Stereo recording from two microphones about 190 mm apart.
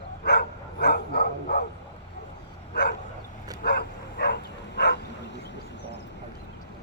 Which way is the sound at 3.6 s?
60° left (ahead or behind).